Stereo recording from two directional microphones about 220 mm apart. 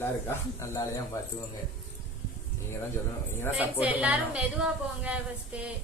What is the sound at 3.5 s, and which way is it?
A woman's voice, 5° right (ahead or behind).